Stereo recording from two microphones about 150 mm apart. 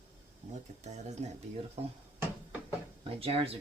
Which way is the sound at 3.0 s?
40° right (ahead or behind).